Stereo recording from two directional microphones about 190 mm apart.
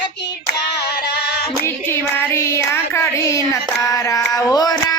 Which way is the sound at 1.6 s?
15° left (ahead or behind).